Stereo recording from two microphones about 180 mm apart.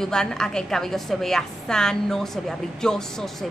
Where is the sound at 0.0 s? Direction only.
5° left (ahead or behind).